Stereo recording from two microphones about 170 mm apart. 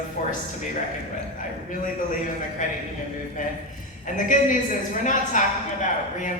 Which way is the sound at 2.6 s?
50° left (ahead or behind).